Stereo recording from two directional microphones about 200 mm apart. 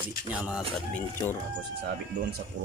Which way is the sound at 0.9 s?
10° left (ahead or behind).